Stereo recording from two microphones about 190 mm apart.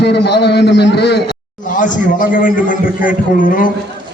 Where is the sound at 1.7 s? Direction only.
45° left (ahead or behind).